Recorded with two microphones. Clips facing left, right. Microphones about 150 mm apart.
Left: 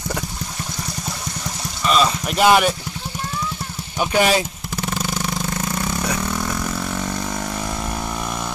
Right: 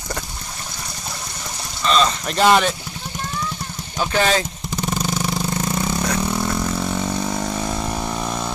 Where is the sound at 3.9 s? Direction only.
15° left (ahead or behind).